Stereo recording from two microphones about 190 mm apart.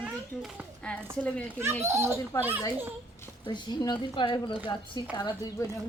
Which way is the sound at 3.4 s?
25° left (ahead or behind).